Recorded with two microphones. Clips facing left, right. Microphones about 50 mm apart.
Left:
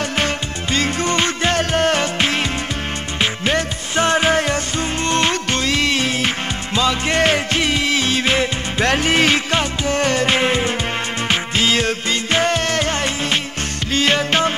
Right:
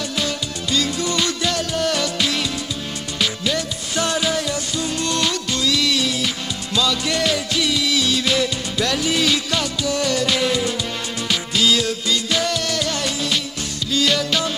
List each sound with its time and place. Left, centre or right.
0.2 s music: left